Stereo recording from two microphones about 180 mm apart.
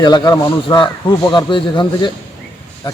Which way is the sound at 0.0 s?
25° left (ahead or behind).